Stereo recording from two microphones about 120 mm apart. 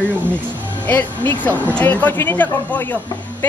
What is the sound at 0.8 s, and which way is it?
A man's voice, 15° left (ahead or behind).